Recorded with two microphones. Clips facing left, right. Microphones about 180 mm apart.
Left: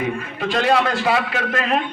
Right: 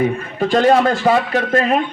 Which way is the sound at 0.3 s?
45° right (ahead or behind).